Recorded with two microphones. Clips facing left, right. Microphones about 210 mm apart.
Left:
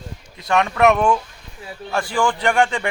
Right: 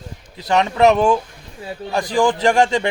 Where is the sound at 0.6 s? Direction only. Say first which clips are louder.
Right 2 dB; 30° right (ahead or behind).